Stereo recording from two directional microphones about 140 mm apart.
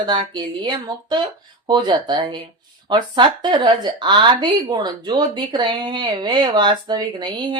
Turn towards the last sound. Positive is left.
turn(degrees=-30)  # may be behind; listen again after turning